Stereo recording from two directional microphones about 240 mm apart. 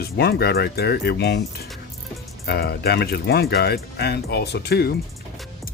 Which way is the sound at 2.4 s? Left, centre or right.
Left.